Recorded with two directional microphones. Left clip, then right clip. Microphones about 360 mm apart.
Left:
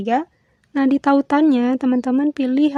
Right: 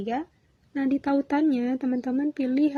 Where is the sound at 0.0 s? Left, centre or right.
Left.